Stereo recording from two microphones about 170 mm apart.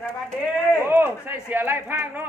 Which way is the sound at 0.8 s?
10° right (ahead or behind).